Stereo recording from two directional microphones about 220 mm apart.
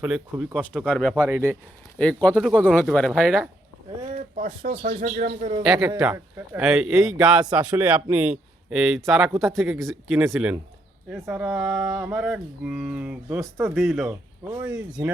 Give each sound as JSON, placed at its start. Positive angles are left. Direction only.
{"t": 0.0, "sound": "a man's voice", "side_deg": -5}
{"t": 1.1, "sound": "speech", "side_deg": -10}
{"t": 2.2, "sound": "a man's voice", "side_deg": 5}
{"t": 4.2, "sound": "speech", "side_deg": -40}
{"t": 5.6, "sound": "a man's voice", "side_deg": 0}
{"t": 13.7, "sound": "a man's voice", "side_deg": 0}
{"t": 14.1, "sound": "a man's voice", "side_deg": -10}